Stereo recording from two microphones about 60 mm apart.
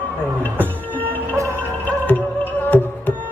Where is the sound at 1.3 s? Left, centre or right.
Right.